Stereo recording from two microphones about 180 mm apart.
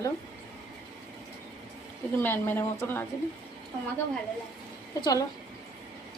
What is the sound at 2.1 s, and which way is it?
Speech, 10° left (ahead or behind).